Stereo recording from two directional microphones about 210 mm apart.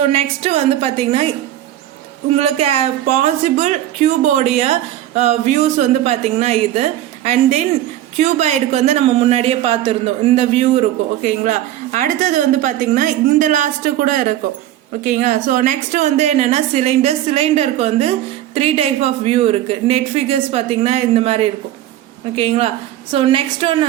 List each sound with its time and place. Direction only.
0.1 s a man's voice: 30° right (ahead or behind)
2.3 s speech: 30° right (ahead or behind)
8.2 s a man's voice: 35° right (ahead or behind)